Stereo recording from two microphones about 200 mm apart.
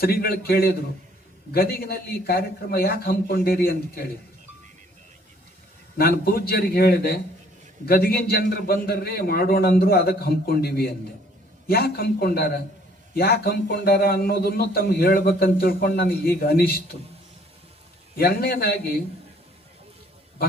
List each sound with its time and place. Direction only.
0.0 s a man's voice: 50° left (ahead or behind)
6.0 s a man's voice: 50° left (ahead or behind)
18.2 s a man's voice: 50° left (ahead or behind)